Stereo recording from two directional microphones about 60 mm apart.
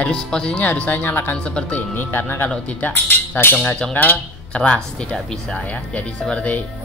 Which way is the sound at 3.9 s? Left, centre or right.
Left.